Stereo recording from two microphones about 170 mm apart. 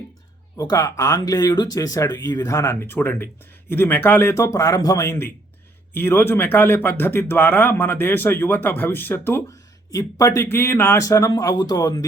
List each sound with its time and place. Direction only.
0.5 s a man's voice: 20° left (ahead or behind)